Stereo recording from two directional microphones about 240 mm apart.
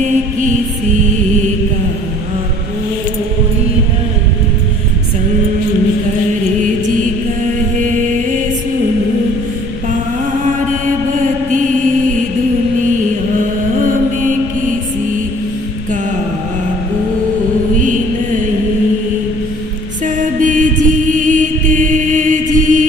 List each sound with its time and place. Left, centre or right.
0.0 s music: right
7.8 s music: right
20.1 s mantra: right